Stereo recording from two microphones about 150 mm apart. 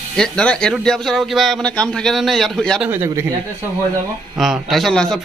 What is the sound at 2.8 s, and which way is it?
Speech, 15° right (ahead or behind).